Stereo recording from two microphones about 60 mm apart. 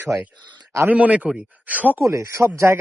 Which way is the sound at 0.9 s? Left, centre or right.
Right.